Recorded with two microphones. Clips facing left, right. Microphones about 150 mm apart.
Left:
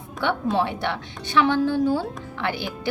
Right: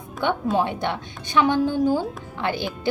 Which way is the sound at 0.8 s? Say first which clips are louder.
Right 1 dB; 15° right (ahead or behind).